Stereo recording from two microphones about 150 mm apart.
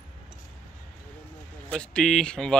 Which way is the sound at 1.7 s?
5° left (ahead or behind).